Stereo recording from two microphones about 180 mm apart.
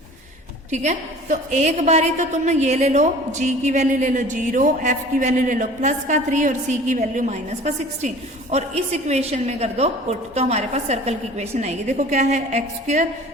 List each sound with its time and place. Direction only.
0.7 s a woman's voice: 40° right (ahead or behind)